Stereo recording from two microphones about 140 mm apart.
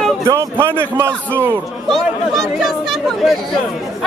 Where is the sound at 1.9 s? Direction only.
Centre (ahead or behind).